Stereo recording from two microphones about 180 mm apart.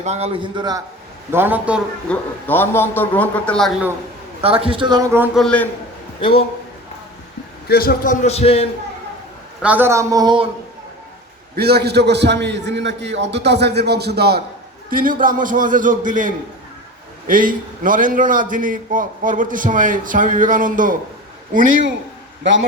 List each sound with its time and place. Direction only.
0.0 s a man's voice: 35° right (ahead or behind)
1.3 s speech: 10° right (ahead or behind)
2.0 s a man's voice: 10° left (ahead or behind)
4.4 s a man's voice: 30° right (ahead or behind)
5.1 s speech: 10° right (ahead or behind)
5.4 s a man's voice: 5° left (ahead or behind)
6.1 s speech: 30° left (ahead or behind)
7.7 s a man's voice: 55° left (ahead or behind); by 8.7 s 35° left (ahead or behind)
9.6 s speech: 10° right (ahead or behind)
11.5 s a man's voice: 60° right (ahead or behind)
14.8 s a man's voice: 50° right (ahead or behind)